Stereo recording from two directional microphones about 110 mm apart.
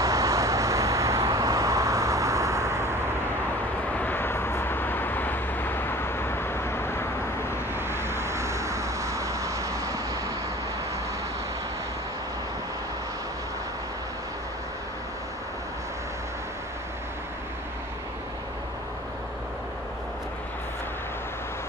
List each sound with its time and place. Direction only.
0.0 s vehicle: 30° right (ahead or behind)
4.0 s vehicle: 20° left (ahead or behind)
7.7 s vehicle: 20° right (ahead or behind)